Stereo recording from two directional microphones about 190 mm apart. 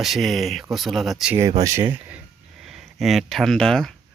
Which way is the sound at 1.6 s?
20° right (ahead or behind).